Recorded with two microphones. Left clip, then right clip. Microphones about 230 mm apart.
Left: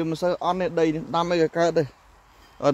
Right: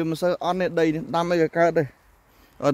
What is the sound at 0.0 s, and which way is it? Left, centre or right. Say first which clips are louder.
Speech: even; right.